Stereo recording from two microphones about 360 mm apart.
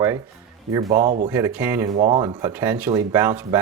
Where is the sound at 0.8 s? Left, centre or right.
Right.